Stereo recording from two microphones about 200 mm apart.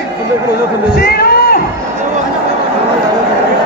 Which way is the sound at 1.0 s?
50° left (ahead or behind).